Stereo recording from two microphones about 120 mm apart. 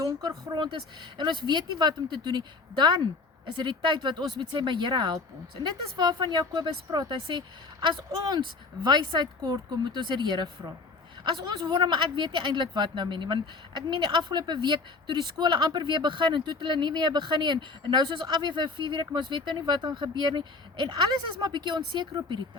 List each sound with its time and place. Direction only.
0.0 s a woman's voice: 30° right (ahead or behind)
9.9 s a woman's voice: 40° right (ahead or behind)